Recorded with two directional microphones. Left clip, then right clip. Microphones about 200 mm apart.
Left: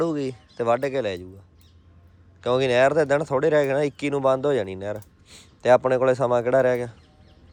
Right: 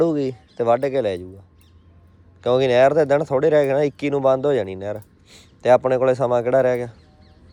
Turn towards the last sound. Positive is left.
turn(degrees=15)  # may be behind; listen again after turning